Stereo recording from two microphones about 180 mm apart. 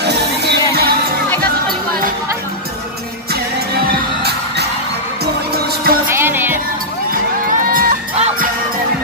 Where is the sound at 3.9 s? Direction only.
65° right (ahead or behind).